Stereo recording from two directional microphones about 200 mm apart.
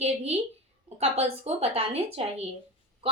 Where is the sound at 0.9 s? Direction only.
30° right (ahead or behind).